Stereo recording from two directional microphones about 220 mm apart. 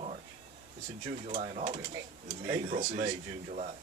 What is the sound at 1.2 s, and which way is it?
Speech, 35° right (ahead or behind).